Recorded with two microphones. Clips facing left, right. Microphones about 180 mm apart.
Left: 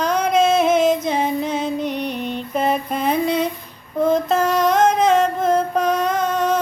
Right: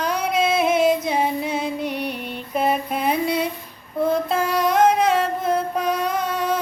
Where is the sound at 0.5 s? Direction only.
5° right (ahead or behind).